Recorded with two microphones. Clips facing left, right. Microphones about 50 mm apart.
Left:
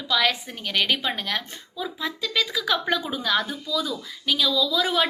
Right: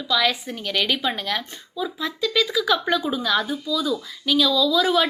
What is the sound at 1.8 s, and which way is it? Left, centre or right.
A woman's voice, centre.